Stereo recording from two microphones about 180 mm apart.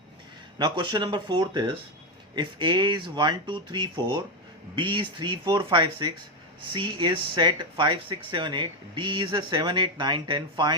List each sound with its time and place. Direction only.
0.6 s speech: 25° right (ahead or behind)